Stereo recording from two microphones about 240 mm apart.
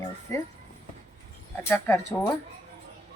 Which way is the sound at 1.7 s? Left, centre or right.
Centre.